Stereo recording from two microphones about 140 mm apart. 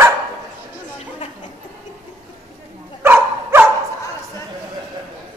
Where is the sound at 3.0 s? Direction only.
15° right (ahead or behind).